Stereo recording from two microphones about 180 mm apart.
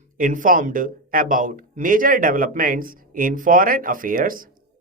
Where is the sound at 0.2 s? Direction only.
50° right (ahead or behind).